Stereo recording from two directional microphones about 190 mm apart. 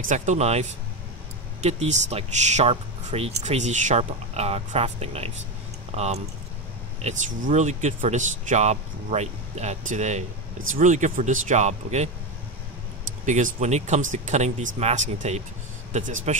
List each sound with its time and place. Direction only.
0.0 s speech: 40° right (ahead or behind)
13.2 s speech: 40° right (ahead or behind)